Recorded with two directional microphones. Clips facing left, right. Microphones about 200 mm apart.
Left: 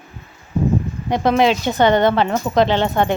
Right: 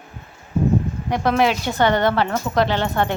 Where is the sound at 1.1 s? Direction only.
20° left (ahead or behind).